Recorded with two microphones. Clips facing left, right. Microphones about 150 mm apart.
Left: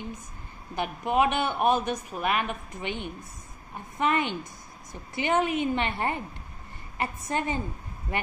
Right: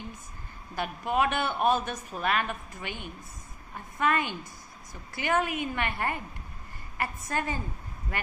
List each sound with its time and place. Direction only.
0.7 s a woman's voice: 20° left (ahead or behind)